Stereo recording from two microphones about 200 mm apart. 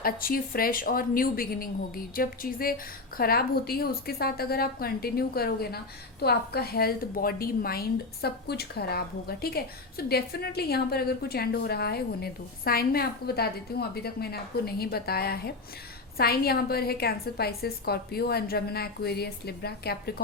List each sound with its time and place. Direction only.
0.0 s a woman's voice: 45° left (ahead or behind)